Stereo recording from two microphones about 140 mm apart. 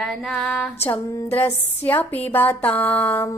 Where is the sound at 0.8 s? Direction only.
20° left (ahead or behind).